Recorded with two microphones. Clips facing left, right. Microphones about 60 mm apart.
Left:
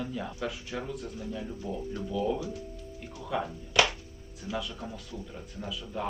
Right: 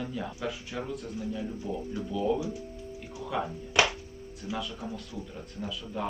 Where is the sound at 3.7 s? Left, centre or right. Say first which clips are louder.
Even; right.